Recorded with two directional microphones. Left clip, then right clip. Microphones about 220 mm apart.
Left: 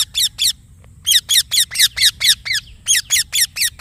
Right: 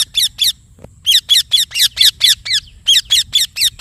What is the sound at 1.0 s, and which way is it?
Bird, 10° right (ahead or behind).